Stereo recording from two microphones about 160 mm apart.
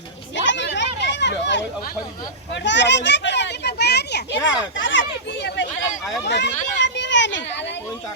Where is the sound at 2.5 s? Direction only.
90° left.